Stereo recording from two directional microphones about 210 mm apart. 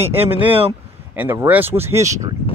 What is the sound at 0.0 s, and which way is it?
Speech, 10° right (ahead or behind).